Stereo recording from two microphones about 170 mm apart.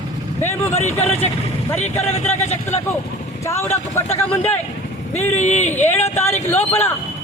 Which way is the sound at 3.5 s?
15° left (ahead or behind).